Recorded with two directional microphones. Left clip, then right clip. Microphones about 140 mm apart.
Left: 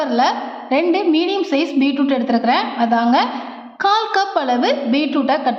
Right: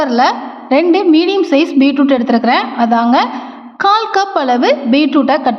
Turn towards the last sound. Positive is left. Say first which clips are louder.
# right 5 dB
turn(degrees=-35)  # may be behind; listen again after turning